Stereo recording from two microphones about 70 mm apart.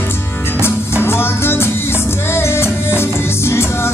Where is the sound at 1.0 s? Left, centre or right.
Left.